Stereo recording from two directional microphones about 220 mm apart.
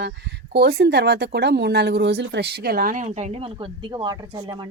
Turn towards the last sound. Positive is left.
turn(degrees=-20)  # may be behind; listen again after turning